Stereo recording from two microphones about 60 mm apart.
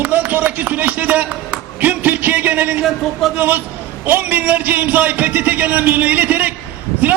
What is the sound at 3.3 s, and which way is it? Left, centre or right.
A man's voice, right.